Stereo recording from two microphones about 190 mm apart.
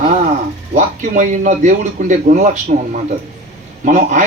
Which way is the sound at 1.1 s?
40° right (ahead or behind).